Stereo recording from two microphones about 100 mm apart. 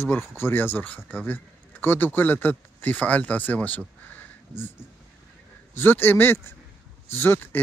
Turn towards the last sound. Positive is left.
turn(degrees=25)  # may be behind; listen again after turning